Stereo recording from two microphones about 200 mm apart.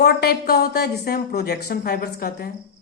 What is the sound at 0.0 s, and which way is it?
A woman's voice, 55° left (ahead or behind).